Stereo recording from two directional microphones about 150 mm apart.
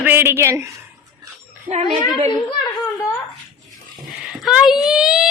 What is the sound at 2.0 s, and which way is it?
Speech, 25° left (ahead or behind).